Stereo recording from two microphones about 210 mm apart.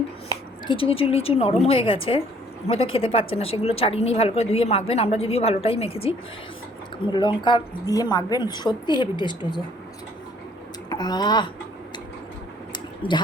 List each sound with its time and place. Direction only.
0.7 s a woman's voice: 25° left (ahead or behind)
10.8 s speech: 20° left (ahead or behind)
12.7 s a sound: 20° left (ahead or behind)